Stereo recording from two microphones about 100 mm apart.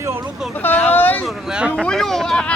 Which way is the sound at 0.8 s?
20° left (ahead or behind).